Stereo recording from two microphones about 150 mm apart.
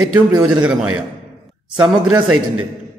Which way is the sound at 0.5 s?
10° right (ahead or behind).